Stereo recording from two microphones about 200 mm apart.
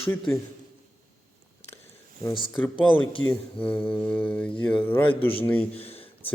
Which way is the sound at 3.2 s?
80° left.